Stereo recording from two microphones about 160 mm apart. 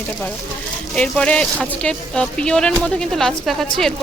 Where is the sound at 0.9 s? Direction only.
5° left (ahead or behind).